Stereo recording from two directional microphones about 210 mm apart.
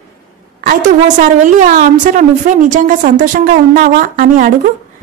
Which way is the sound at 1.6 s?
40° right (ahead or behind).